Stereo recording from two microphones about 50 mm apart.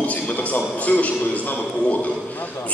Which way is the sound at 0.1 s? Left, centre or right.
Left.